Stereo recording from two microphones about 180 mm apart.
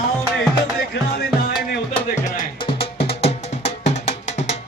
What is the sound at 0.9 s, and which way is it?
Music, 75° left (ahead or behind).